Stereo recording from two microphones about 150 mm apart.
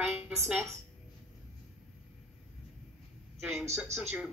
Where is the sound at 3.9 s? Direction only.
45° right (ahead or behind).